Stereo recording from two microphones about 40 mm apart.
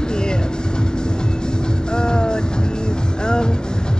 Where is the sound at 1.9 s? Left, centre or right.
Left.